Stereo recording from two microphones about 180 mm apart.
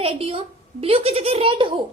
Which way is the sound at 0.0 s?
35° right (ahead or behind).